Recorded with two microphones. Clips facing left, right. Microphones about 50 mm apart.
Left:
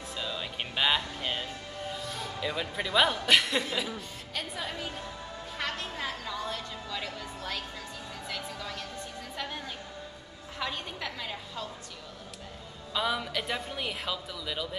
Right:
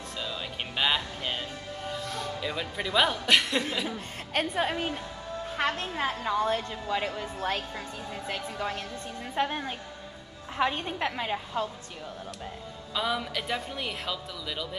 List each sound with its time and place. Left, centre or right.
0.2 s music: centre
1.9 s speech: centre
4.3 s a woman's voice: right
12.9 s speech: centre